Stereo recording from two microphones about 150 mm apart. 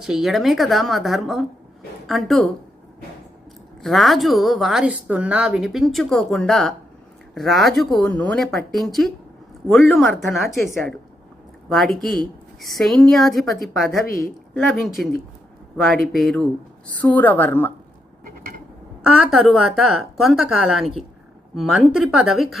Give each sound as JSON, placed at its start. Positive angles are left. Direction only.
{"t": 0.0, "sound": "a woman's voice", "side_deg": 0}
{"t": 3.8, "sound": "a woman's voice", "side_deg": 0}
{"t": 12.0, "sound": "a woman's voice", "side_deg": 5}
{"t": 14.1, "sound": "a woman's voice", "side_deg": 80}
{"t": 14.5, "sound": "a woman's voice", "side_deg": 0}
{"t": 16.1, "sound": "speech", "side_deg": 5}
{"t": 19.0, "sound": "a woman's voice", "side_deg": -5}